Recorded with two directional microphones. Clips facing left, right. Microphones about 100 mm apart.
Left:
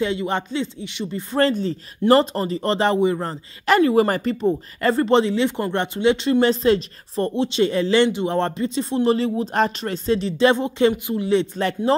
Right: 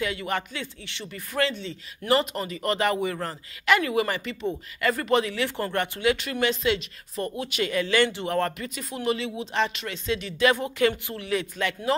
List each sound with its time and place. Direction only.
0.0 s speech: 25° left (ahead or behind)
1.4 s speech: 40° left (ahead or behind); by 3.3 s 25° left (ahead or behind)
3.6 s speech: 35° left (ahead or behind)
6.4 s speech: 35° left (ahead or behind)